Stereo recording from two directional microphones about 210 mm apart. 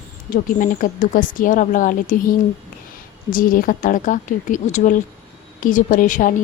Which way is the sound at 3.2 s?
40° left (ahead or behind).